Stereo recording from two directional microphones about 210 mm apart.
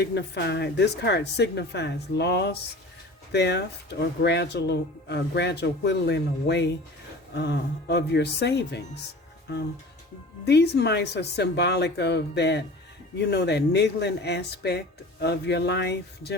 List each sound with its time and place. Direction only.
0.0 s speech: 55° left (ahead or behind)